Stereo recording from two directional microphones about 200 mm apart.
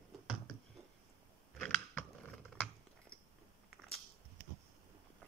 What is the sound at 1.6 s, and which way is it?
Biting, 5° left (ahead or behind).